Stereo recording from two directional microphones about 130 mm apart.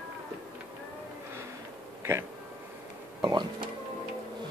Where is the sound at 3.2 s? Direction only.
35° right (ahead or behind).